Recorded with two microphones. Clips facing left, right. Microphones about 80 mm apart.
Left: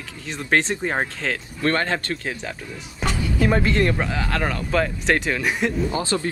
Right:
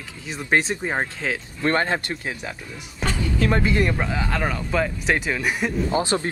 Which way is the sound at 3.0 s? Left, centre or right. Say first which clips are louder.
Left 1 dB; centre.